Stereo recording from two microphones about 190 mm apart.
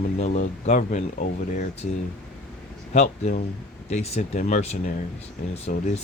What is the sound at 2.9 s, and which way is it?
Speech, 40° left (ahead or behind).